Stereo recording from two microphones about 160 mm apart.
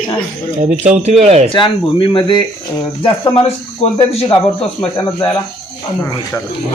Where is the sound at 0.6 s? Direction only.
50° right (ahead or behind).